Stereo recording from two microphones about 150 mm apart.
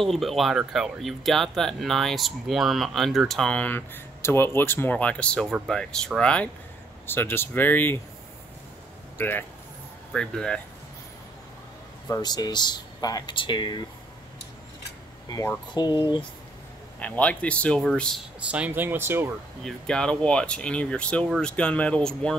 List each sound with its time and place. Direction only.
0.0 s speech: centre (ahead or behind)
9.2 s speech: 15° left (ahead or behind)
12.1 s speech: 25° left (ahead or behind)
15.2 s speech: 20° left (ahead or behind)
17.0 s speech: 10° left (ahead or behind)
18.5 s speech: 10° right (ahead or behind)
19.6 s speech: 5° left (ahead or behind)